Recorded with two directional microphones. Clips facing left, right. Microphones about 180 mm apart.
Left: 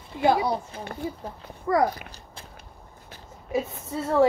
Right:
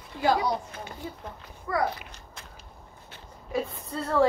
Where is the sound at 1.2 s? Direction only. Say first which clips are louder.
Left 4 dB; 40° left (ahead or behind).